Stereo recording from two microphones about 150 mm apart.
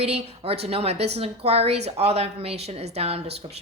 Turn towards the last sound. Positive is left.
turn(degrees=-45)  # may be behind; listen again after turning